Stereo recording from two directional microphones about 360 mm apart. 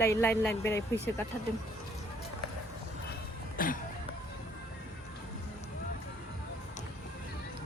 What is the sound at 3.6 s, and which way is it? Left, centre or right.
Music, left.